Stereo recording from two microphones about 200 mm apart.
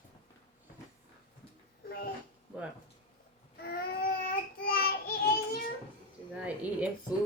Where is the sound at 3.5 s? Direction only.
50° left (ahead or behind).